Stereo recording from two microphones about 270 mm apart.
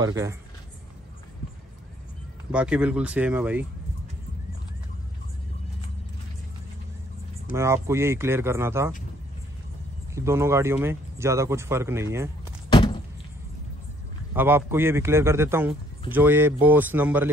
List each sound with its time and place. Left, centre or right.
0.0 s speech: centre
2.5 s speech: centre
7.5 s speech: centre
10.1 s speech: centre
12.6 s a sound: centre
14.3 s speech: centre